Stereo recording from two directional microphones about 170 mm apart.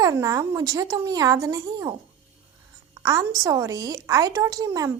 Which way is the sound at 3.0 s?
20° right (ahead or behind).